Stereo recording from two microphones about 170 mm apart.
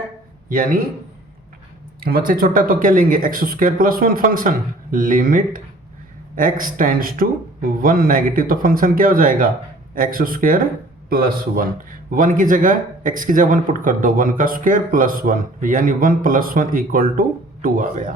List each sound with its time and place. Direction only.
0.4 s a man's voice: 55° right (ahead or behind)
2.0 s a man's voice: 60° right (ahead or behind)